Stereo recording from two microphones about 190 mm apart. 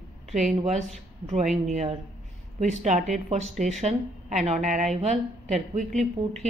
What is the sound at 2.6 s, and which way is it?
Speech, 40° right (ahead or behind).